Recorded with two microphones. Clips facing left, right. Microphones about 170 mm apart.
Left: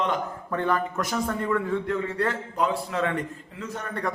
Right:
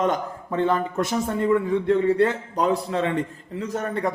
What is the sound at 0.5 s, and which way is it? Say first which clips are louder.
A man's voice: right 4 dB; 25° right (ahead or behind).